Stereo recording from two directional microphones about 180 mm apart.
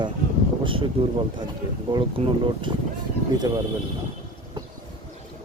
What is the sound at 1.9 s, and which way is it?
Speech, 25° right (ahead or behind).